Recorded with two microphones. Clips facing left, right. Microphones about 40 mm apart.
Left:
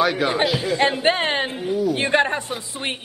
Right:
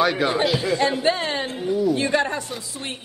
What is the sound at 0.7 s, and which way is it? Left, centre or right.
Speech, left.